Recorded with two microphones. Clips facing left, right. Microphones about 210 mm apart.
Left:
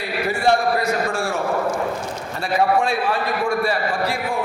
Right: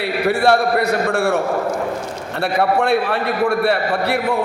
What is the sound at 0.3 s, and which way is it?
A man's voice, 65° right (ahead or behind).